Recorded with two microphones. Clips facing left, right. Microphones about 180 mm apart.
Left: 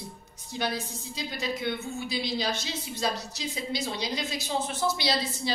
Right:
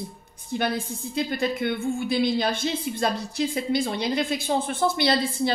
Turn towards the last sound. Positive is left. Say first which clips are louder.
# right 6 dB
turn(degrees=-55)  # may be behind; listen again after turning